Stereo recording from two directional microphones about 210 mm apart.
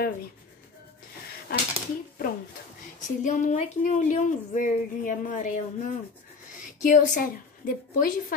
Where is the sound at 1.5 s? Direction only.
45° left (ahead or behind).